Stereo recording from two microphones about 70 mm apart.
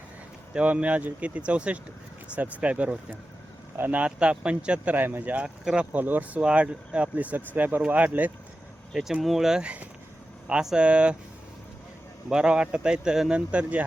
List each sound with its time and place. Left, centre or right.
0.5 s speech: centre
4.9 s speech: right
6.0 s speech: right
8.9 s speech: centre
12.3 s speech: centre